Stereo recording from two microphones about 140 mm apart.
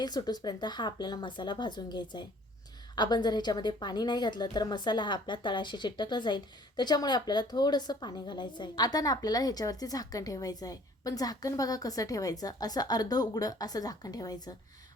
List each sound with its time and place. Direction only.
0.0 s a woman's voice: 30° left (ahead or behind)